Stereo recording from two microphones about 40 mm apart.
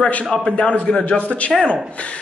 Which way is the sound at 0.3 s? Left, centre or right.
Left.